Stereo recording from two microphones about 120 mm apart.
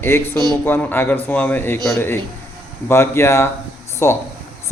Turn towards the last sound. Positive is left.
turn(degrees=20)  # may be behind; listen again after turning